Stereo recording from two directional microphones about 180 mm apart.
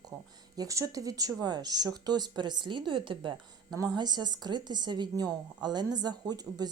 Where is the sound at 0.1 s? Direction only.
20° right (ahead or behind).